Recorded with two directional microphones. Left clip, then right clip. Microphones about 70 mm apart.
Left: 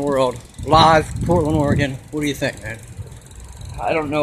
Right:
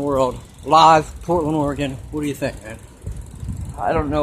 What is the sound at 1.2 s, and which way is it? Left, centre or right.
Speech, right.